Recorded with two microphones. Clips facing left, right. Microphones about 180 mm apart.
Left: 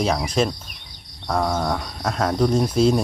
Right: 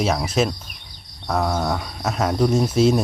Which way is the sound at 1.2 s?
5° right (ahead or behind).